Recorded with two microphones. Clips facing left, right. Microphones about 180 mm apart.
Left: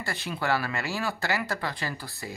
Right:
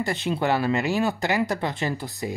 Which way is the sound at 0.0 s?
20° right (ahead or behind).